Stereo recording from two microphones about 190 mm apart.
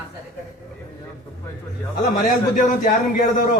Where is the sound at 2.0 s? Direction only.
45° left (ahead or behind).